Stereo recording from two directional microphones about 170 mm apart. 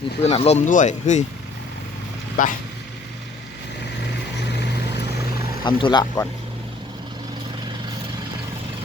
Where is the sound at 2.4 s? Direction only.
50° left (ahead or behind).